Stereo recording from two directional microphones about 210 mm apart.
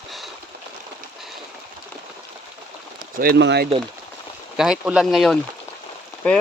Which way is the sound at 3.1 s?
50° right (ahead or behind).